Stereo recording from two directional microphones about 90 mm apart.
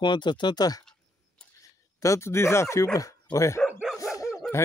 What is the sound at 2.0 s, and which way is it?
Speech, 35° left (ahead or behind).